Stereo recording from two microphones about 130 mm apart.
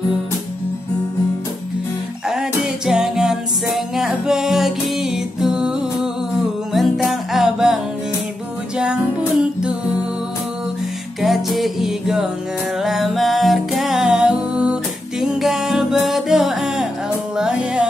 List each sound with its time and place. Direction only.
2.2 s music: 5° right (ahead or behind)
11.1 s music: centre (ahead or behind)